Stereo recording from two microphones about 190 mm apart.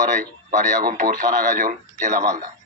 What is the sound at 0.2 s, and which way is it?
Speech, 45° right (ahead or behind).